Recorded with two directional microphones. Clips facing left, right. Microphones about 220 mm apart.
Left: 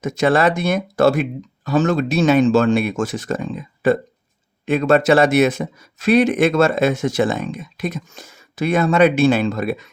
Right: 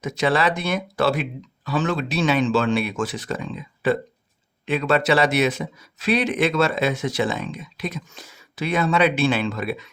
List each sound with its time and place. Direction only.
0.0 s speech: 45° left (ahead or behind)